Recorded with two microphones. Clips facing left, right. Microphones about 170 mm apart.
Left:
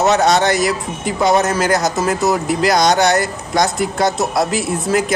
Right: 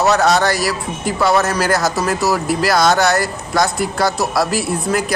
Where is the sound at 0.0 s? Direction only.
20° left (ahead or behind).